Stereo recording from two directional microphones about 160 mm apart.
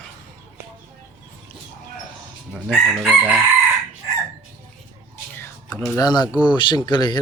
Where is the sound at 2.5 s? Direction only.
5° right (ahead or behind).